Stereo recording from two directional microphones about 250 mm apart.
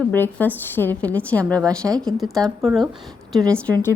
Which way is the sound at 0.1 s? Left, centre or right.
Centre.